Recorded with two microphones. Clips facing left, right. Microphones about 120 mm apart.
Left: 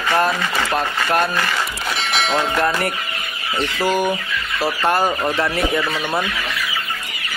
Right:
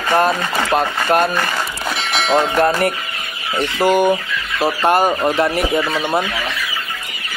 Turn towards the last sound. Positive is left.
turn(degrees=-20)  # may be behind; listen again after turning